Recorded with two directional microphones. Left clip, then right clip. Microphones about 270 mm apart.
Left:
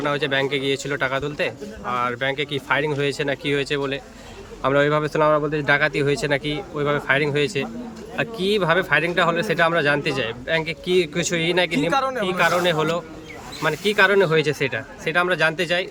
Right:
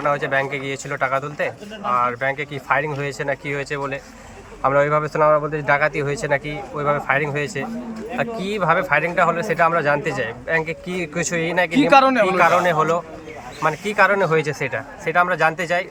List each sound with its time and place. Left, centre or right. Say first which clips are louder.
0.0 s a man's voice: right 2 dB; centre
10.7 s speech: left 5 dB; left
11.1 s a man's voice: even; centre